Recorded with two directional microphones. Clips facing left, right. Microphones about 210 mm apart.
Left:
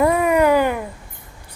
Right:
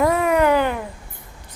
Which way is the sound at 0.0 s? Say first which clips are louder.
Left 2 dB; 10° left (ahead or behind).